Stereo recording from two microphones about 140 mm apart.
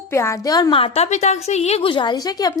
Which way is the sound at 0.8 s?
50° left (ahead or behind).